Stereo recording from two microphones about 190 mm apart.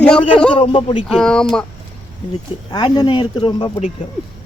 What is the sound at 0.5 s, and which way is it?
Speech, 25° left (ahead or behind).